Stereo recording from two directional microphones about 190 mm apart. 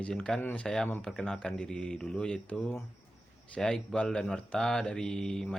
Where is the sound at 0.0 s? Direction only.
5° left (ahead or behind).